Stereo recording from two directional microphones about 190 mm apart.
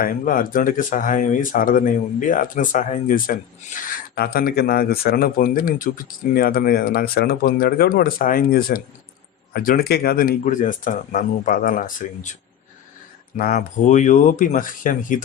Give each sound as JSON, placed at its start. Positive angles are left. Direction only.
{"t": 0.0, "sound": "speech", "side_deg": 50}
{"t": 13.3, "sound": "speech", "side_deg": 45}